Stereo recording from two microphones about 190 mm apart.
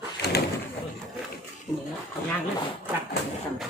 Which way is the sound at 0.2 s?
55° left (ahead or behind).